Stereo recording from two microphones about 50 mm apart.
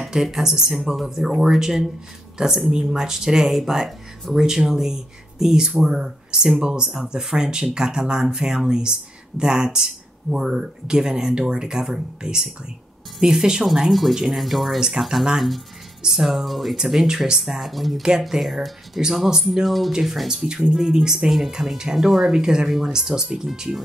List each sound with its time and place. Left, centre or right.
0.1 s speech: centre
13.7 s speech: centre